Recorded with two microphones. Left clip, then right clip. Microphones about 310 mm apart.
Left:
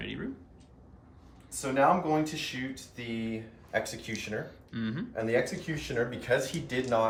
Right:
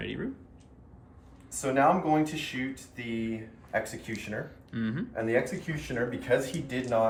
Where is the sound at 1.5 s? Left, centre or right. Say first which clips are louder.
Right 1 dB; centre.